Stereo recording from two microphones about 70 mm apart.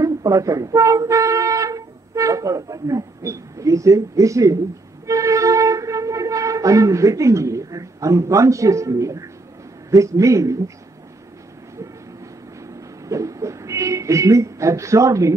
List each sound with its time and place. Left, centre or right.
0.0 s speech: right
5.0 s wind instrument: right
9.8 s a man's voice: right
13.0 s speech: right